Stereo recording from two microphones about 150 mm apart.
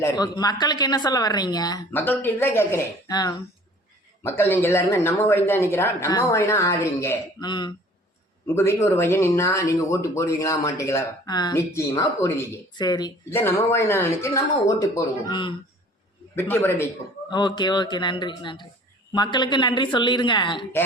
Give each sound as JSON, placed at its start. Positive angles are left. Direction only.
{"t": 0.0, "sound": "speech", "side_deg": 25}
{"t": 1.9, "sound": "speech", "side_deg": 15}
{"t": 3.1, "sound": "speech", "side_deg": 25}
{"t": 4.2, "sound": "speech", "side_deg": 15}
{"t": 7.3, "sound": "speech", "side_deg": 30}
{"t": 8.5, "sound": "speech", "side_deg": 15}
{"t": 13.3, "sound": "speech", "side_deg": 15}
{"t": 16.3, "sound": "speech", "side_deg": 15}
{"t": 17.2, "sound": "speech", "side_deg": 30}